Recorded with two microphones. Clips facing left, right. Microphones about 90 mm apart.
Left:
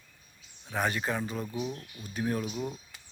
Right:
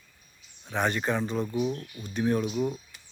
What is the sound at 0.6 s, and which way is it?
Speech, 5° left (ahead or behind).